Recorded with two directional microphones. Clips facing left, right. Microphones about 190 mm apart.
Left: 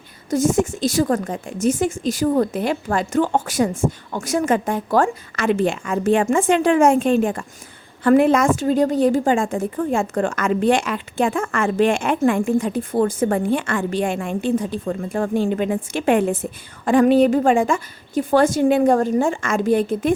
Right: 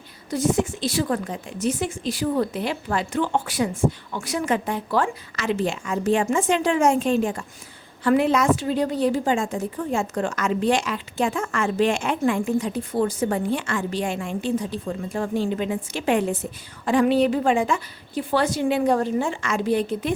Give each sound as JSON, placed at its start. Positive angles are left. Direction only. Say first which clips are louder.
{"t": 0.3, "sound": "a woman's voice", "louder": "left 4 dB", "side_deg": 45}